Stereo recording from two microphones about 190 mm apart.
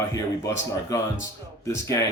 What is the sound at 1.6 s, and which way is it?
Speech, 15° left (ahead or behind).